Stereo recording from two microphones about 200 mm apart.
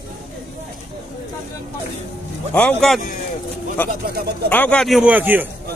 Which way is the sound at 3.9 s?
50° right (ahead or behind).